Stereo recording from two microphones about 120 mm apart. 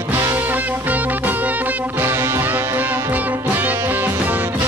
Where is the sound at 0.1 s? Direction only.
20° right (ahead or behind).